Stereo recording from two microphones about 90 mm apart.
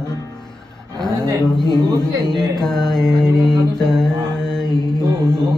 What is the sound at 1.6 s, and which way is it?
Speech, 50° left (ahead or behind).